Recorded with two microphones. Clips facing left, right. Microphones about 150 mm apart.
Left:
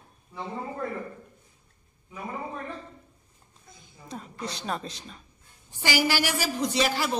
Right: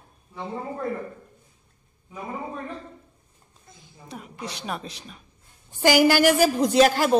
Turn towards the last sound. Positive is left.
turn(degrees=-45)  # may be behind; listen again after turning